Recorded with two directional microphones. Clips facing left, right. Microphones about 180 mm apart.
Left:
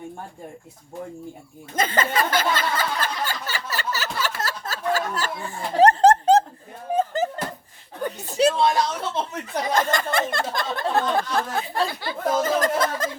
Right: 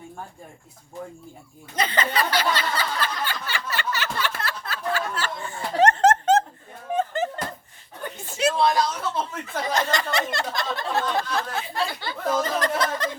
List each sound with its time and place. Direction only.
1.7 s a sound: 45° left (ahead or behind)
8.5 s a woman's voice: 25° left (ahead or behind)
9.3 s speech: 50° left (ahead or behind)
12.4 s snicker: 45° left (ahead or behind)